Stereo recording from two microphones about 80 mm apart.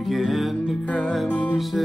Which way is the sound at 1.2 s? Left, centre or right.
Centre.